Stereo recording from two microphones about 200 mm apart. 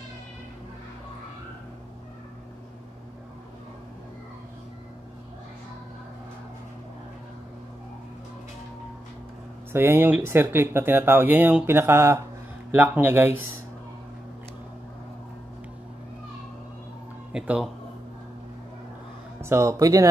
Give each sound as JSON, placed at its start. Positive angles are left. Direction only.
{"t": 9.7, "sound": "speech", "side_deg": -10}
{"t": 17.3, "sound": "speech", "side_deg": -5}
{"t": 19.4, "sound": "speech", "side_deg": -15}